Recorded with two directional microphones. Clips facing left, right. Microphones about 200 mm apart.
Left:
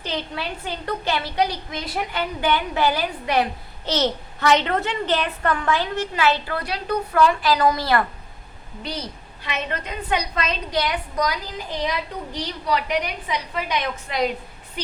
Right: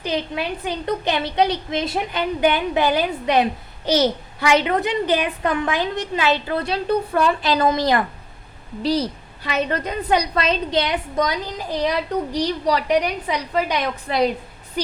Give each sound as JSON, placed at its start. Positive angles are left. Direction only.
{"t": 0.0, "sound": "a woman's voice", "side_deg": -15}
{"t": 8.8, "sound": "a woman's voice", "side_deg": -35}
{"t": 14.1, "sound": "a woman's voice", "side_deg": -35}